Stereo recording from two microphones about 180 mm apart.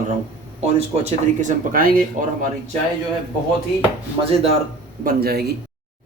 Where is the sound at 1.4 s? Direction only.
50° right (ahead or behind).